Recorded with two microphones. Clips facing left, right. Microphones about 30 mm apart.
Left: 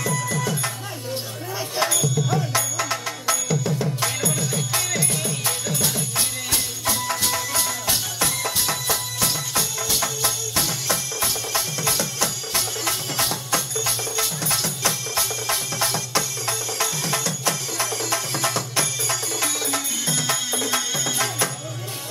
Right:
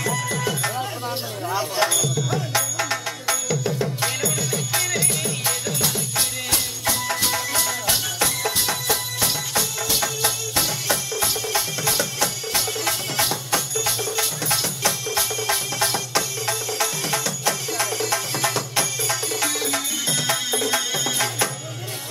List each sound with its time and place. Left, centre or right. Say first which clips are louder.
0.0 s music: right 1 dB; right
1.5 s music: right 2 dB; centre